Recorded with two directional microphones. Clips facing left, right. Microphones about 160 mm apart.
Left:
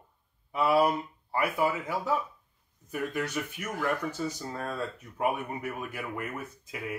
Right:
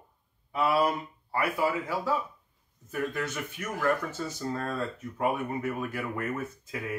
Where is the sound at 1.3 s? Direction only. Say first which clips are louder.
Even; 20° left (ahead or behind).